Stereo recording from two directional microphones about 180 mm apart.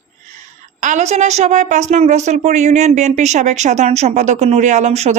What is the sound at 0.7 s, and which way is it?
A woman's voice, 45° right (ahead or behind).